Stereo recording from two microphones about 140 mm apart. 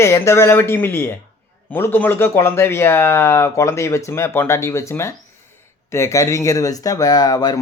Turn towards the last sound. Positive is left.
turn(degrees=30)  # may be behind; listen again after turning